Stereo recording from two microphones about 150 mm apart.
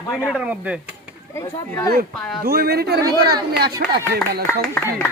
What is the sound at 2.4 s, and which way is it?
Speech, 90° right.